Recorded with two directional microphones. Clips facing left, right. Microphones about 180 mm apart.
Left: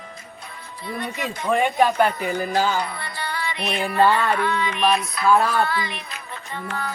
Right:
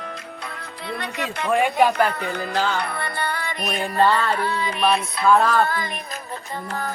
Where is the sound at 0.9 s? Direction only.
70° right (ahead or behind).